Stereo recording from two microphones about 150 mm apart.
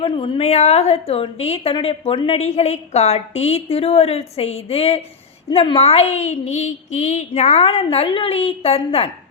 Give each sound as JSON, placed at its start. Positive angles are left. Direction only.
{"t": 0.0, "sound": "a woman's voice", "side_deg": 40}